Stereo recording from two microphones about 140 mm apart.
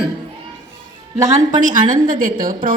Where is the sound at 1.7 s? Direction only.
70° right (ahead or behind).